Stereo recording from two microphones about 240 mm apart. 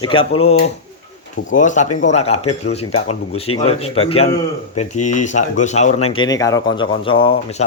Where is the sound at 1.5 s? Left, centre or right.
Left.